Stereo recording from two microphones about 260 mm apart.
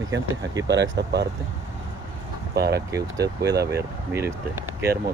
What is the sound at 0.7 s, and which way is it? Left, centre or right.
Speech, right.